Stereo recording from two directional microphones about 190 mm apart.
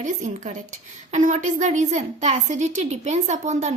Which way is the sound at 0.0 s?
40° right (ahead or behind).